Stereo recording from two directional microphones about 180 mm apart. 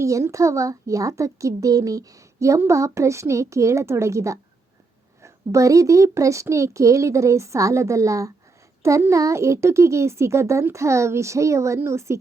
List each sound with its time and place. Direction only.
0.0 s a child's voice: 15° right (ahead or behind)